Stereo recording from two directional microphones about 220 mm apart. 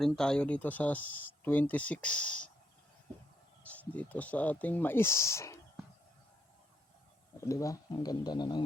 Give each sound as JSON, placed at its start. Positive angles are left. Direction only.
{"t": 0.0, "sound": "speech", "side_deg": 5}
{"t": 3.6, "sound": "speech", "side_deg": 5}
{"t": 7.4, "sound": "speech", "side_deg": 15}